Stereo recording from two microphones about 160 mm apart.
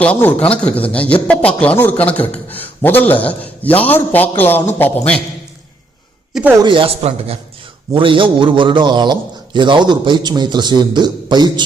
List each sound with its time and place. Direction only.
0.0 s a man's voice: 10° left (ahead or behind)
6.6 s a man's voice: 30° right (ahead or behind)